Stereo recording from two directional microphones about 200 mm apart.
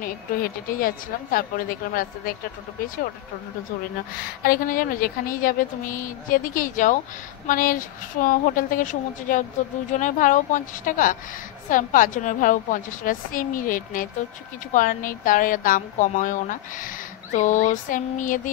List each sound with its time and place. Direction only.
0.0 s speech: 45° left (ahead or behind)
4.4 s a woman's voice: 45° left (ahead or behind)